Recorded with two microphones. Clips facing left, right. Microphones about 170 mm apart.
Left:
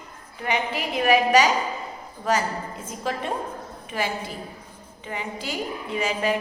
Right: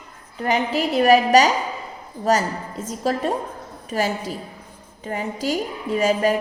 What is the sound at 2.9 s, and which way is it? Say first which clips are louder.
A woman's voice: right 6 dB; 40° right (ahead or behind).